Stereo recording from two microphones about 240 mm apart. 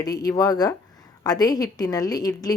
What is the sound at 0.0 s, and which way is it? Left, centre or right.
A woman's voice, centre.